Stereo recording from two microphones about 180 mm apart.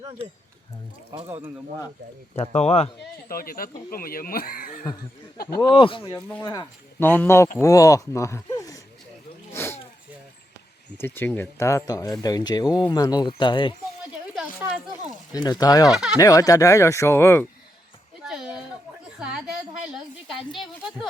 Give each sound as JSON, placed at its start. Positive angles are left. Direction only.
{"t": 2.3, "sound": "speech", "side_deg": 35}
{"t": 3.2, "sound": "speech", "side_deg": 55}
{"t": 5.5, "sound": "speech", "side_deg": 25}
{"t": 7.0, "sound": "speech", "side_deg": 10}
{"t": 9.5, "sound": "a sound", "side_deg": 15}
{"t": 10.9, "sound": "speech", "side_deg": 10}
{"t": 15.3, "sound": "speech", "side_deg": 20}
{"t": 15.9, "sound": "speech", "side_deg": -5}
{"t": 16.1, "sound": "speech", "side_deg": 20}
{"t": 18.2, "sound": "a sound", "side_deg": -5}